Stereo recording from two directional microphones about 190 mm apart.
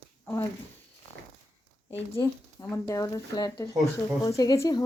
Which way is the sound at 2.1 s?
15° left (ahead or behind).